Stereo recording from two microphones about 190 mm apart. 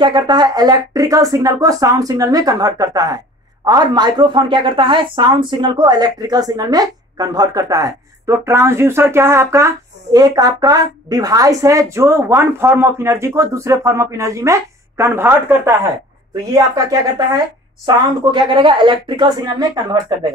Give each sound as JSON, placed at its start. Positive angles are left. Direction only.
{"t": 0.0, "sound": "a woman's voice", "side_deg": -25}